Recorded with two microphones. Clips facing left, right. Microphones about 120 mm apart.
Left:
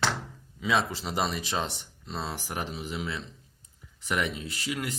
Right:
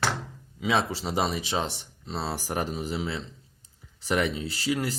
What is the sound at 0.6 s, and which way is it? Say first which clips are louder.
Speech: right 1 dB; 25° right (ahead or behind).